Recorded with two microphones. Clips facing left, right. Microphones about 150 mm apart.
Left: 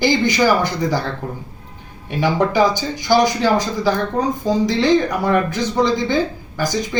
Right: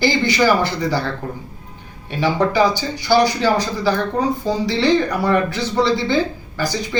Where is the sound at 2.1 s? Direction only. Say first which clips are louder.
Even; 15° left (ahead or behind).